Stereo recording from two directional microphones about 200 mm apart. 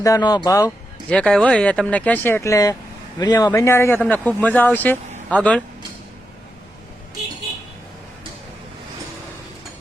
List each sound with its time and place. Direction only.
0.0 s speech: 20° left (ahead or behind)
1.1 s speech: 5° left (ahead or behind)